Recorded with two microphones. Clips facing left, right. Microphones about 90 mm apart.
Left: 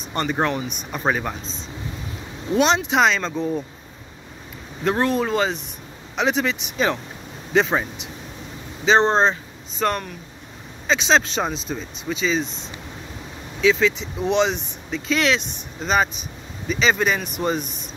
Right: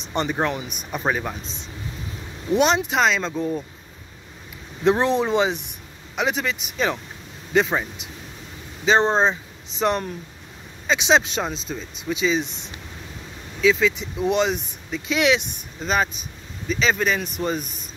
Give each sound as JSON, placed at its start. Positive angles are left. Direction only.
{"t": 0.3, "sound": "speech", "side_deg": -5}
{"t": 2.6, "sound": "speech", "side_deg": -5}
{"t": 5.0, "sound": "speech", "side_deg": -20}
{"t": 6.1, "sound": "speech", "side_deg": -5}
{"t": 8.8, "sound": "speech", "side_deg": -5}
{"t": 9.8, "sound": "speech", "side_deg": -20}
{"t": 11.3, "sound": "speech", "side_deg": 0}
{"t": 13.6, "sound": "speech", "side_deg": 0}
{"t": 15.8, "sound": "speech", "side_deg": 0}